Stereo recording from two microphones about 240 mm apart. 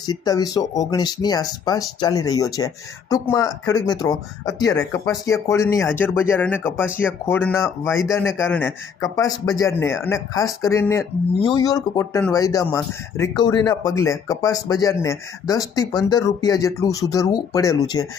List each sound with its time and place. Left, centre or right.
0.0 s speech: centre